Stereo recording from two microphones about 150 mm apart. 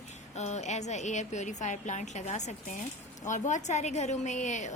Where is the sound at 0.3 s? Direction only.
50° left (ahead or behind).